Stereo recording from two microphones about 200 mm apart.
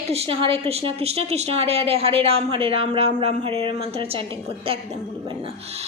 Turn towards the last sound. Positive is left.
turn(degrees=-30)  # may be behind; listen again after turning